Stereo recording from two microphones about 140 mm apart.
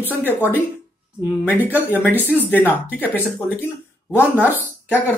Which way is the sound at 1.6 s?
15° right (ahead or behind).